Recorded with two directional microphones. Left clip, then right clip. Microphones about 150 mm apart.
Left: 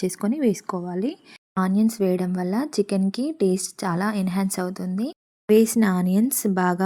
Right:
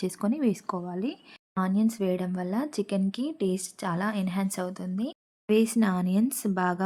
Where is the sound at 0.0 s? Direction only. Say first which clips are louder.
Left 5 dB; 20° left (ahead or behind).